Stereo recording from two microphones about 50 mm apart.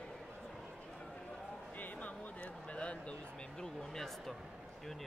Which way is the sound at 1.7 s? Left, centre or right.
Left.